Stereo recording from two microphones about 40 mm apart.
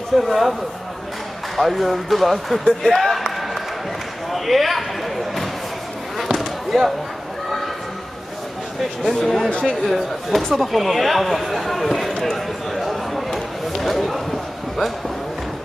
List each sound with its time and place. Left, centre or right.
0.2 s speech: centre
1.6 s speech: centre
2.8 s a sound: centre
4.3 s basketball bounce: centre
9.0 s speech: centre
9.5 s speech: left
9.8 s speech: centre
12.7 s a sound: centre